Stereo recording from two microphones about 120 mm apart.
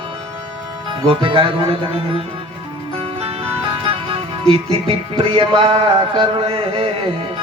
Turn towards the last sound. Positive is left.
turn(degrees=-50)  # may be behind; listen again after turning